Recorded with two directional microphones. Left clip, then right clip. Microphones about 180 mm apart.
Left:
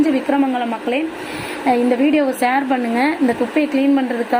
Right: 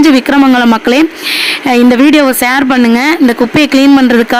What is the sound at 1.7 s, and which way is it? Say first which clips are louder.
Speech: right 8 dB; 35° right (ahead or behind).